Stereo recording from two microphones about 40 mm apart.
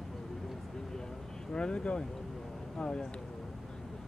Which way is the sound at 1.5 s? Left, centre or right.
Left.